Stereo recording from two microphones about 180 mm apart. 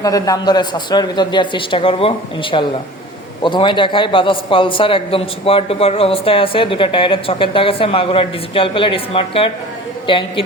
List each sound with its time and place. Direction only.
0.0 s a man's voice: 20° left (ahead or behind)